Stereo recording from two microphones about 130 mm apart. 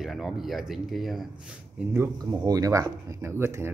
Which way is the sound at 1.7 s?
15° right (ahead or behind).